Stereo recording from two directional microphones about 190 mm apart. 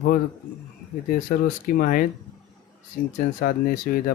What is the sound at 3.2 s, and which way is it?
Speech, 45° left (ahead or behind).